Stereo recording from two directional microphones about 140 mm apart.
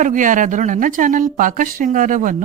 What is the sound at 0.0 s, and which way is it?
Speech, 70° right (ahead or behind).